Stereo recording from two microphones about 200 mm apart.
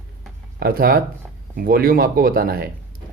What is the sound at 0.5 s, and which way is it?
Speech, 50° right (ahead or behind).